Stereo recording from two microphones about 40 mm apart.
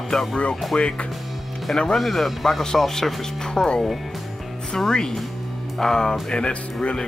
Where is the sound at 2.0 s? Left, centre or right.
Centre.